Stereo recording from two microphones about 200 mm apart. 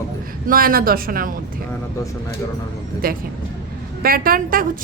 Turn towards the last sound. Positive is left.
turn(degrees=-45)  # may be behind; listen again after turning